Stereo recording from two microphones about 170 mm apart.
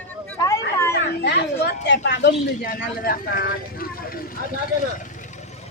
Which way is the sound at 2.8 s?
60° left (ahead or behind).